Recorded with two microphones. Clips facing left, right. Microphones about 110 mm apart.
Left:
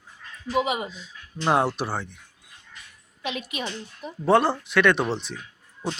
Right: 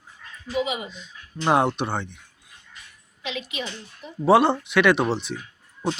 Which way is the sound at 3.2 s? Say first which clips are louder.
Even; 50° left (ahead or behind).